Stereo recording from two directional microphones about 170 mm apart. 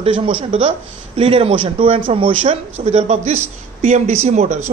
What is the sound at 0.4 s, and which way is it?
Speech, 30° right (ahead or behind).